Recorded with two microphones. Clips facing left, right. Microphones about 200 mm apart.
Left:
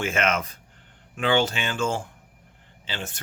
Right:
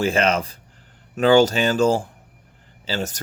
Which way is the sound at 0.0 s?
35° right (ahead or behind).